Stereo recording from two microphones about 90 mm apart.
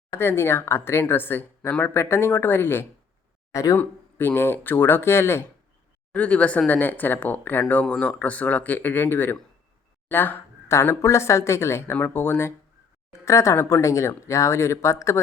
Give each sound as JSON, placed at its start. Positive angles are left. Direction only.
{"t": 0.1, "sound": "speech", "side_deg": 30}
{"t": 3.5, "sound": "speech", "side_deg": 40}
{"t": 3.8, "sound": "speech", "side_deg": 20}
{"t": 6.1, "sound": "speech", "side_deg": 15}